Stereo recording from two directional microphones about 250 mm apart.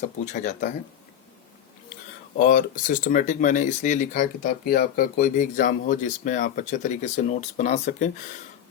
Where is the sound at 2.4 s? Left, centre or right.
Left.